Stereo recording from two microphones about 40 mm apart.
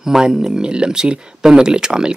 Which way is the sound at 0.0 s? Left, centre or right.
Centre.